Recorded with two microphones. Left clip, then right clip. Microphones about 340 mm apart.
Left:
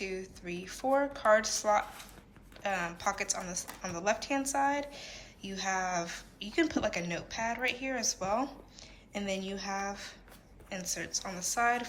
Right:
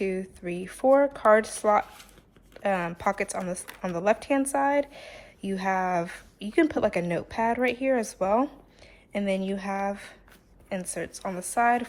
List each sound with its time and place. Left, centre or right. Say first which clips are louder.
0.0 s a woman's voice: right 8 dB; centre